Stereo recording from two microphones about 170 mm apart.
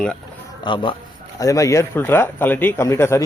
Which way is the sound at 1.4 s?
20° left (ahead or behind).